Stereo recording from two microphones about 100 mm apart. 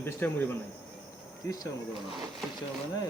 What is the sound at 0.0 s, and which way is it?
Speech, 20° left (ahead or behind).